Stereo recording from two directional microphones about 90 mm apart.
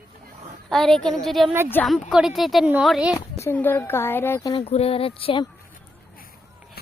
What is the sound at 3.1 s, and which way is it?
A woman's voice, 30° left (ahead or behind).